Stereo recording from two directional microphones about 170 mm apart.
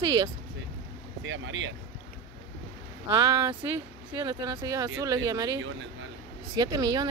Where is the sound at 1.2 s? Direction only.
90° right.